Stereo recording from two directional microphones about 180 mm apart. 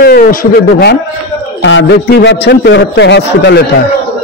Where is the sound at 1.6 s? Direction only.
90° left.